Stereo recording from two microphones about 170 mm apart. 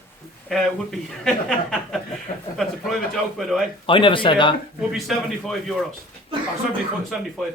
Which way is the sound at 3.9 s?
30° left (ahead or behind).